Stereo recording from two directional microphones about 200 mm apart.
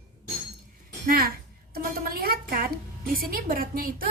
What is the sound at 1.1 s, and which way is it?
Music, 50° right (ahead or behind).